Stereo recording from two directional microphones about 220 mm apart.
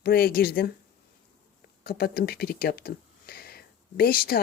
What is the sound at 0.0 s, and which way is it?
Speech, 45° left (ahead or behind).